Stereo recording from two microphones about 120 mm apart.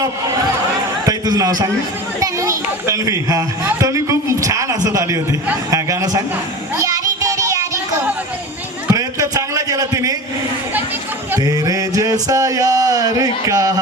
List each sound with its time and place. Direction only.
1.0 s a child's voice: 30° right (ahead or behind)
6.8 s music: 30° right (ahead or behind)
8.9 s a sound: 30° right (ahead or behind)
11.3 s music: 30° right (ahead or behind)